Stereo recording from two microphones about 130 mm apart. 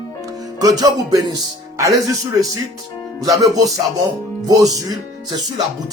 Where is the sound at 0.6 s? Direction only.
30° right (ahead or behind).